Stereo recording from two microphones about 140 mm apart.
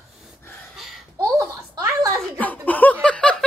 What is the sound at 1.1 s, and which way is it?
Laughter, 15° right (ahead or behind).